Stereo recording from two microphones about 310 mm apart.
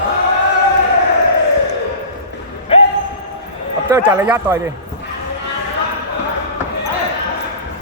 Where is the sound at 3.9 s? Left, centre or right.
Centre.